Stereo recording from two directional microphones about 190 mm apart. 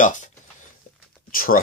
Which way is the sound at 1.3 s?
50° left (ahead or behind).